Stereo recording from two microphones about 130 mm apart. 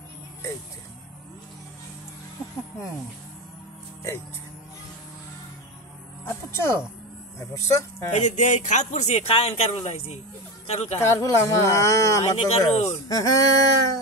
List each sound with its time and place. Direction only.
6.2 s speech: 20° left (ahead or behind)
8.2 s a man's voice: 65° left (ahead or behind)
11.0 s speech: 20° left (ahead or behind)
12.2 s a man's voice: 55° left (ahead or behind)
13.1 s speech: 25° left (ahead or behind)